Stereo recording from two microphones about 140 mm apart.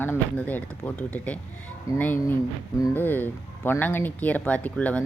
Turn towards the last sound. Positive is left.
turn(degrees=10)  # may be behind; listen again after turning